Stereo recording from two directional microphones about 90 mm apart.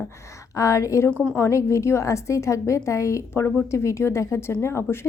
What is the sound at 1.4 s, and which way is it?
A woman's voice, 35° left (ahead or behind).